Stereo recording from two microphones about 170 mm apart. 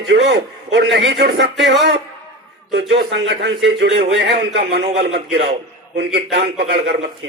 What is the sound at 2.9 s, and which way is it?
A man's voice, 90° right.